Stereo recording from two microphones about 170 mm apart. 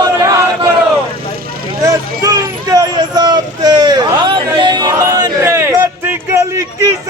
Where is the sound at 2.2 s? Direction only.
20° right (ahead or behind).